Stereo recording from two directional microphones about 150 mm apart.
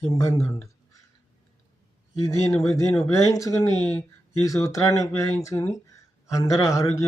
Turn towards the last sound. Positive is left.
turn(degrees=20)  # may be behind; listen again after turning